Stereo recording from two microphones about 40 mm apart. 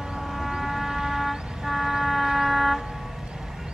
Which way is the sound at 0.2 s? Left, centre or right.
Centre.